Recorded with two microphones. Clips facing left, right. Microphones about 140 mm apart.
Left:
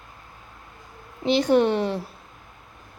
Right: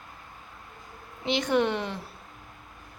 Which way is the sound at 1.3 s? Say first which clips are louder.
Left 6 dB; 35° left (ahead or behind).